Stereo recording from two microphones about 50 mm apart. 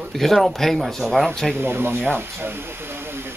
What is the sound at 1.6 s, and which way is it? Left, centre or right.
Speech, right.